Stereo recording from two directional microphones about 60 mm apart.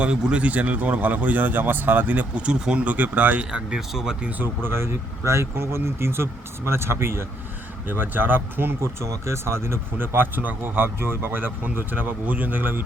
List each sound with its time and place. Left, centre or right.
0.0 s speech: centre
4.7 s speech: right
7.9 s speech: right
8.8 s speech: right